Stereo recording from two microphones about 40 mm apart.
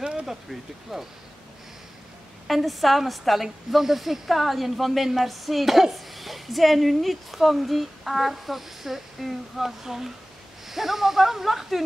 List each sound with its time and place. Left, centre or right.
0.0 s a sound: centre
0.3 s speech: centre
2.4 s a woman's voice: centre